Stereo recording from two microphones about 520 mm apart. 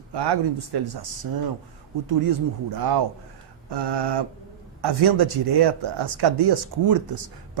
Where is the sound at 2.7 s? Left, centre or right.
Right.